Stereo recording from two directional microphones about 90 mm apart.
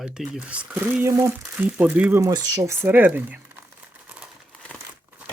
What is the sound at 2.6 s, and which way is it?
Speech, 30° right (ahead or behind).